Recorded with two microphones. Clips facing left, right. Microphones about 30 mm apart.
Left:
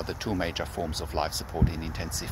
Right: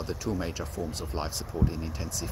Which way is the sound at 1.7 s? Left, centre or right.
Left.